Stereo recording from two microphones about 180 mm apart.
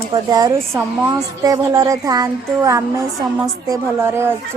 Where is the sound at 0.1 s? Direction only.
20° right (ahead or behind).